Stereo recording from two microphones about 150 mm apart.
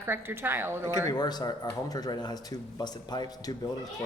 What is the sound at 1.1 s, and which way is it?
Speech, 25° left (ahead or behind).